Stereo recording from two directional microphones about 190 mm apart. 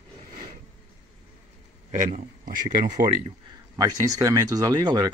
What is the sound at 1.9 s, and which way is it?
Speech, 45° right (ahead or behind).